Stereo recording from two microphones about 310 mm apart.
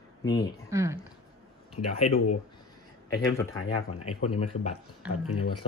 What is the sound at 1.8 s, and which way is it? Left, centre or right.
Speech, left.